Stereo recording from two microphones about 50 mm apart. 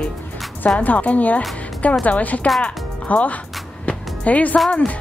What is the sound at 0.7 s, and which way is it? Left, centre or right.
A woman's voice, left.